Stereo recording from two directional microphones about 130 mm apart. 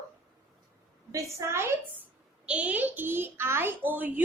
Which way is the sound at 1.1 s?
20° right (ahead or behind).